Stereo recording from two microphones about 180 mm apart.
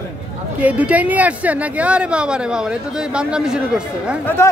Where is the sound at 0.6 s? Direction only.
10° right (ahead or behind).